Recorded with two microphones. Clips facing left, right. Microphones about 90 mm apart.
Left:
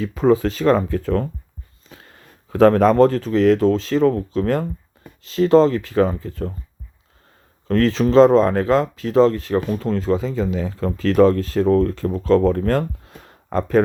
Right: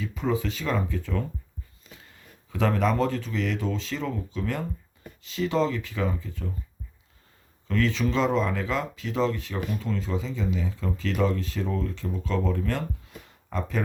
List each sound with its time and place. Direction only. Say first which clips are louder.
0.2 s speech: left 12 dB; 45° left (ahead or behind)
7.7 s speech: left 9 dB; 40° left (ahead or behind); by 12.2 s 55° left (ahead or behind)
12.2 s speech: left 12 dB; 45° left (ahead or behind)